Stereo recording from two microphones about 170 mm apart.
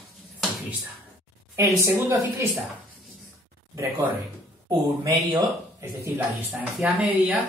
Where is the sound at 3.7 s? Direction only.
15° right (ahead or behind).